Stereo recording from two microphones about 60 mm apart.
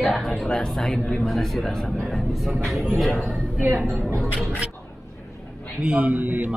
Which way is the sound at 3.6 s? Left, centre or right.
Right.